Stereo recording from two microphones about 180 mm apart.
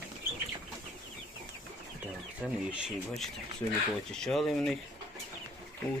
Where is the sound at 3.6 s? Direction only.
25° left (ahead or behind).